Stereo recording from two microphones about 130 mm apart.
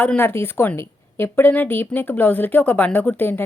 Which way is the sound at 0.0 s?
15° left (ahead or behind).